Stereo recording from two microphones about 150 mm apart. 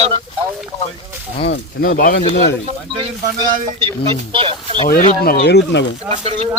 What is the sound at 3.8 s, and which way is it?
Speech, 30° right (ahead or behind).